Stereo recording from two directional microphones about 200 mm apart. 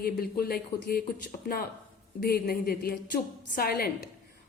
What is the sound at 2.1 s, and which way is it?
A woman's voice, 50° left (ahead or behind).